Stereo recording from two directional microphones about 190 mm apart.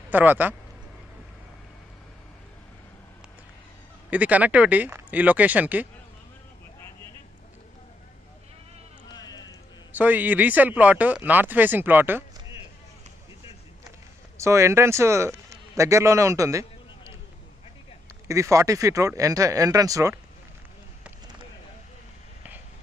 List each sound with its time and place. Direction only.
0.1 s speech: 10° right (ahead or behind)
4.1 s speech: 10° right (ahead or behind)
9.1 s music: 20° left (ahead or behind)
9.9 s speech: 10° right (ahead or behind)
14.3 s a man's voice: 15° right (ahead or behind)
18.3 s speech: 15° right (ahead or behind)